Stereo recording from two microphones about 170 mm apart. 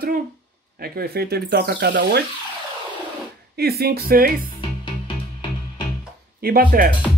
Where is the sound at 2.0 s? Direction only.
65° right (ahead or behind).